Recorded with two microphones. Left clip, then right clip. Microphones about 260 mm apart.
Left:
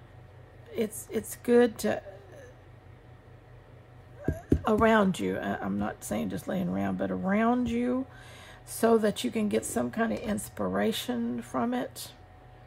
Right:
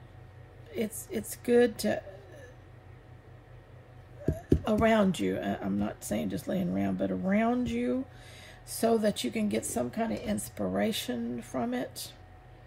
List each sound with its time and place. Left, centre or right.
0.7 s a sound: centre
1.3 s speech: centre
4.3 s speech: centre